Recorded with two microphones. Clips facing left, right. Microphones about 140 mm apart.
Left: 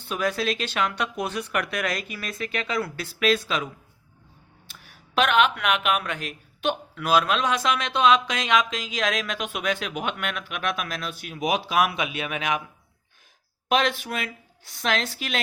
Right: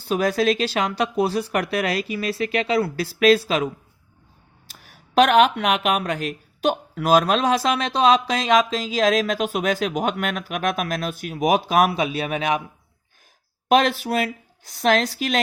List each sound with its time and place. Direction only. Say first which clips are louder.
0.0 s speech: right 6 dB; 35° right (ahead or behind)
4.7 s speech: right 6 dB; 40° right (ahead or behind)
11.9 s speech: right 6 dB; 35° right (ahead or behind)
13.7 s speech: right 6 dB; 40° right (ahead or behind)